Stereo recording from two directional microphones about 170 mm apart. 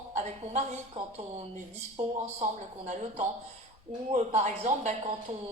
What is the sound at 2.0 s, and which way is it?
Speech, 40° right (ahead or behind).